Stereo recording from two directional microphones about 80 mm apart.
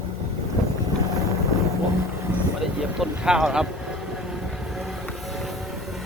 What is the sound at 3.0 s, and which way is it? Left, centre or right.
Speech, centre.